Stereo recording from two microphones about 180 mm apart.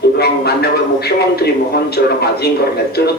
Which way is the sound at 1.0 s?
60° left (ahead or behind).